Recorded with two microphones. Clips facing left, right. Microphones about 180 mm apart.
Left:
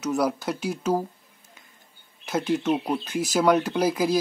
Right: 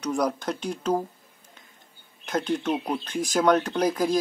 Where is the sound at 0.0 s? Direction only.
5° left (ahead or behind).